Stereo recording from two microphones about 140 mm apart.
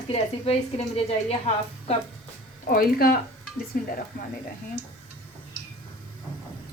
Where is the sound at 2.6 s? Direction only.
90° left.